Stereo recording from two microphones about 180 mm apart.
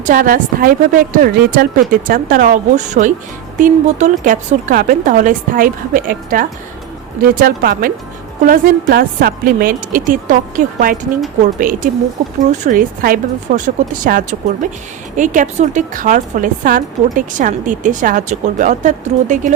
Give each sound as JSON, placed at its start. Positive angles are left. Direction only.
{"t": 0.0, "sound": "speech", "side_deg": -50}